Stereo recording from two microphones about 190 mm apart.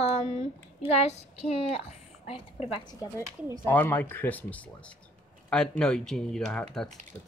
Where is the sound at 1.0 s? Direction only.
35° left (ahead or behind); by 6.9 s 5° left (ahead or behind).